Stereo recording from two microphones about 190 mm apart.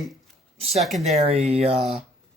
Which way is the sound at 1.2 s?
35° right (ahead or behind).